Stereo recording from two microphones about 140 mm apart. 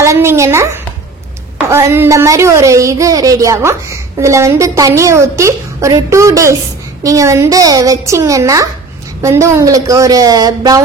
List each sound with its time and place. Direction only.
0.0 s speech: 20° right (ahead or behind)
1.7 s speech: 20° right (ahead or behind)